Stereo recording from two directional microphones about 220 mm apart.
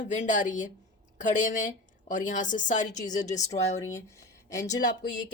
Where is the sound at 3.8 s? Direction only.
15° left (ahead or behind).